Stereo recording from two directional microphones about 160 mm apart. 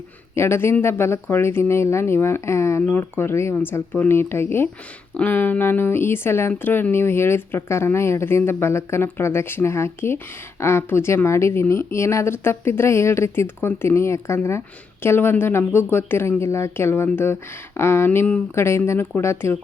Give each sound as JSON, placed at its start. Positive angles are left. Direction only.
{"t": 0.3, "sound": "speech", "side_deg": 15}